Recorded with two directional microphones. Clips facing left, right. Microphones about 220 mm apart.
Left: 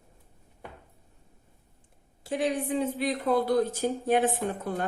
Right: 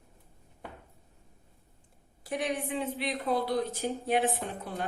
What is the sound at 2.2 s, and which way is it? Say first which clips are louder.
A woman's voice: left 4 dB; 30° left (ahead or behind).